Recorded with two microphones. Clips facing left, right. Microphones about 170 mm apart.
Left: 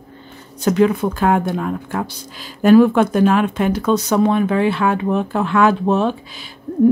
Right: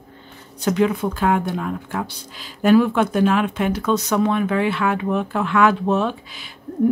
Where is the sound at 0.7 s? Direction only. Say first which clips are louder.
Left 4 dB; 45° left (ahead or behind).